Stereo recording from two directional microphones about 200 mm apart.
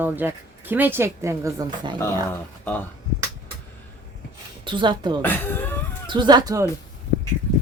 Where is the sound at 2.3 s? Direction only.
10° left (ahead or behind).